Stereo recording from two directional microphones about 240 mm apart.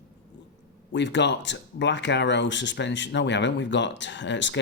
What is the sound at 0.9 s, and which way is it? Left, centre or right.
Speech, left.